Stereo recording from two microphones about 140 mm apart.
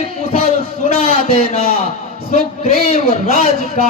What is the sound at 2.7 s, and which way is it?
A man's voice, 90° right.